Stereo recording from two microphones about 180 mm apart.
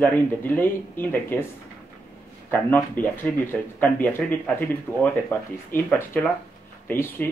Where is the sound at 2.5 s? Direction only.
10° left (ahead or behind).